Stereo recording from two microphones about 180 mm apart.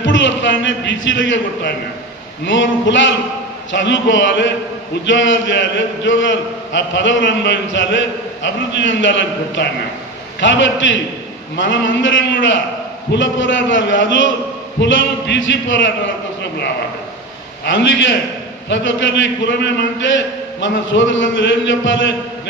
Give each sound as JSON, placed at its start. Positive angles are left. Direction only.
{"t": 0.0, "sound": "a man's voice", "side_deg": 90}
{"t": 17.6, "sound": "a man's voice", "side_deg": 90}